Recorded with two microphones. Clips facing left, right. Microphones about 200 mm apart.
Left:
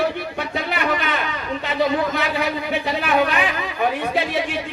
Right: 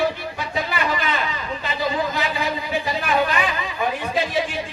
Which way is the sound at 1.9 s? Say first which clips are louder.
Left 3 dB; 65° left (ahead or behind).